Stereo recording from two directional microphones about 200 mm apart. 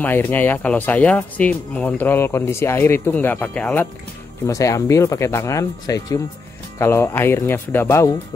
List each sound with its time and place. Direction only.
0.0 s speech: 10° left (ahead or behind)